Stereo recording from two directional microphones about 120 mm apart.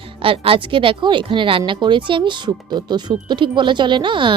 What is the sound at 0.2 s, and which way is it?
Speech, 50° right (ahead or behind).